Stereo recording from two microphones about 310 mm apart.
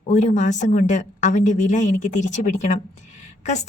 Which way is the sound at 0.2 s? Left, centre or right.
Left.